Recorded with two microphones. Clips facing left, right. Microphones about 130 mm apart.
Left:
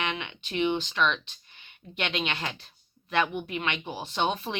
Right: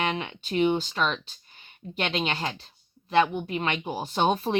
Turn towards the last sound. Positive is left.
turn(degrees=-40)  # may be behind; listen again after turning